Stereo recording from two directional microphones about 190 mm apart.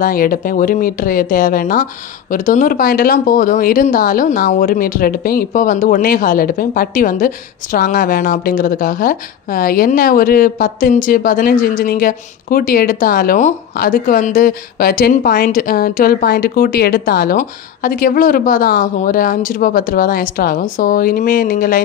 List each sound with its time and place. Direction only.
0.0 s speech: 45° left (ahead or behind)